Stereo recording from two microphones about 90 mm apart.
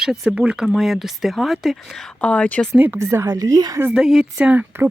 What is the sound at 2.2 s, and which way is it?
Speech, 15° left (ahead or behind).